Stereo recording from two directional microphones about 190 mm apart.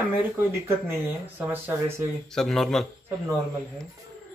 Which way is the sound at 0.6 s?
10° right (ahead or behind).